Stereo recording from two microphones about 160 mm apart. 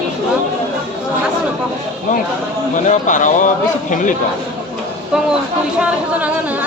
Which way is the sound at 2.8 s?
50° left (ahead or behind).